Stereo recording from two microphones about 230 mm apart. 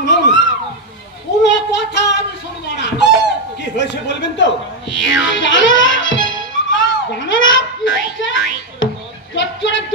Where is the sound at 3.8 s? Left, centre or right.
Left.